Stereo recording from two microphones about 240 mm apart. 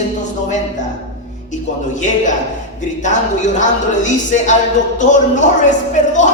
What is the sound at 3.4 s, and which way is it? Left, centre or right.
A woman's voice, left.